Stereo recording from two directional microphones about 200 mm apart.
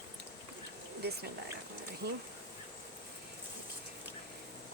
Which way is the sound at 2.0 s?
55° right (ahead or behind).